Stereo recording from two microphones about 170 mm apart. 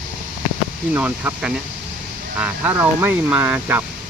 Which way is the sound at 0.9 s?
10° right (ahead or behind).